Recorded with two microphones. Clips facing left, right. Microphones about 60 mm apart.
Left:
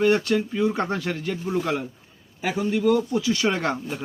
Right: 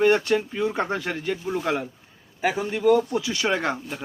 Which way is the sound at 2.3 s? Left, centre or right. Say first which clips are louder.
Left 1 dB; right.